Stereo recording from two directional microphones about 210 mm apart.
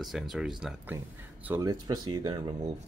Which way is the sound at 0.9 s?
10° right (ahead or behind).